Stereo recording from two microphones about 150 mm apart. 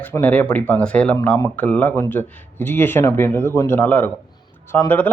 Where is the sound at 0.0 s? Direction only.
10° left (ahead or behind).